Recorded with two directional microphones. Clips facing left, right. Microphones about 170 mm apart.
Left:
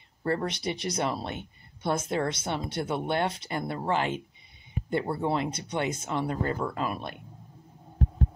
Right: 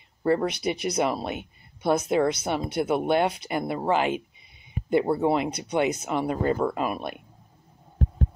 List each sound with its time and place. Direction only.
0.2 s speech: 15° right (ahead or behind)
5.2 s speech: 15° right (ahead or behind)